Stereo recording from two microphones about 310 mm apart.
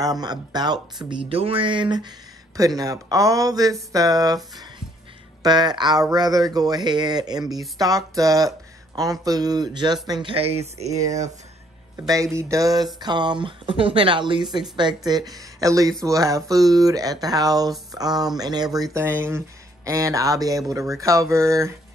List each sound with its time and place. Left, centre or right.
0.0 s speech: centre
5.4 s speech: centre